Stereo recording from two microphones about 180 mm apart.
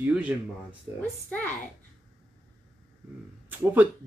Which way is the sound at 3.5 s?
10° right (ahead or behind).